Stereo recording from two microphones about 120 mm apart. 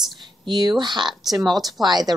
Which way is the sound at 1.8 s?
35° right (ahead or behind).